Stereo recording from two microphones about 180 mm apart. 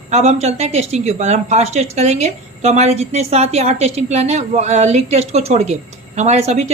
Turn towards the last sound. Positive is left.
turn(degrees=-35)  # may be behind; listen again after turning